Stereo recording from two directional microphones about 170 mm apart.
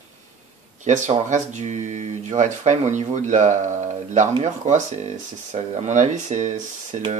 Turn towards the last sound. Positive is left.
turn(degrees=-45)  # may be behind; listen again after turning